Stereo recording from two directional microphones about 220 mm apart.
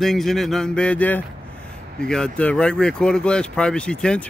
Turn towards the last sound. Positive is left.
turn(degrees=5)  # may be behind; listen again after turning